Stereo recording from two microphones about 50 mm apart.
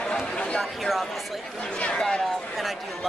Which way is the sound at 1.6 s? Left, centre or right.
Left.